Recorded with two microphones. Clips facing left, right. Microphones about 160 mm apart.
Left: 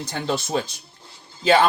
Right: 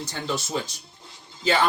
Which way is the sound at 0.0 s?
60° left (ahead or behind).